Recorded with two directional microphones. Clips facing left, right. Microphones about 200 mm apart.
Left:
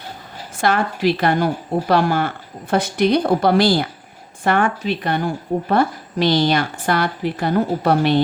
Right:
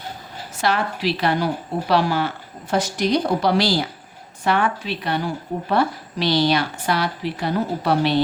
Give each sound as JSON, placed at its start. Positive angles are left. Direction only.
{"t": 0.5, "sound": "a woman's voice", "side_deg": 50}